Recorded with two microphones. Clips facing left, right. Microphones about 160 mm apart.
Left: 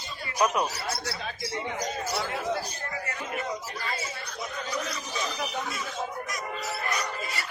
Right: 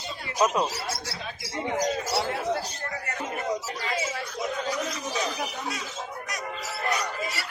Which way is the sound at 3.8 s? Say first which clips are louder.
Right 5 dB; 90° right.